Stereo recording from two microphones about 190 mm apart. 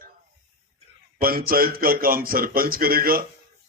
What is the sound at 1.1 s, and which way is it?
Speech, 50° right (ahead or behind).